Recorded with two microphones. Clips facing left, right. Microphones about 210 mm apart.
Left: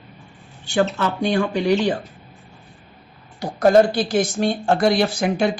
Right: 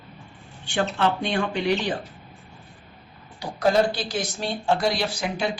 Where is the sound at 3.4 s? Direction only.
50° left (ahead or behind).